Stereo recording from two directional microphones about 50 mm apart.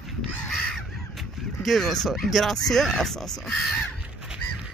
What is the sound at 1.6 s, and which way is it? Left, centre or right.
Speech, centre.